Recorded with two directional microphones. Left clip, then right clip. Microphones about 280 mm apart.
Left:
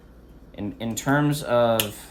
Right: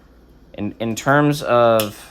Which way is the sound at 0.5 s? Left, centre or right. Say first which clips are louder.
Right 6 dB; right.